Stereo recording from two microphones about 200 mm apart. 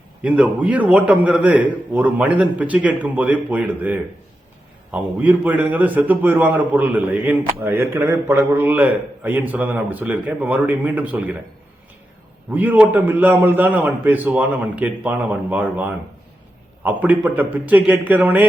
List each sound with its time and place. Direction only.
0.2 s a man's voice: 5° right (ahead or behind)
12.5 s a man's voice: 5° right (ahead or behind)